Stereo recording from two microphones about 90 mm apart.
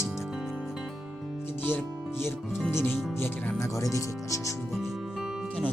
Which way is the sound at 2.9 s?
5° right (ahead or behind).